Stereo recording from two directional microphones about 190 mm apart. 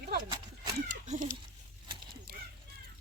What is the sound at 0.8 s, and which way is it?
Cat, 40° right (ahead or behind).